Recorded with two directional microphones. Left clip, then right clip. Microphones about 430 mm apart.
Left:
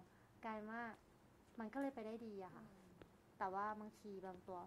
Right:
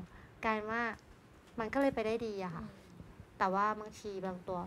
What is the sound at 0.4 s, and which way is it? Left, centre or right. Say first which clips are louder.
A woman's voice: right 15 dB; right.